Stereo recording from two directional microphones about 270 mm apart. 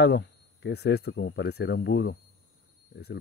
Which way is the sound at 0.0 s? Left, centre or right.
Left.